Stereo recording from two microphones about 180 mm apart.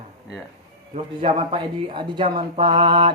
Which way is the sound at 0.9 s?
30° right (ahead or behind).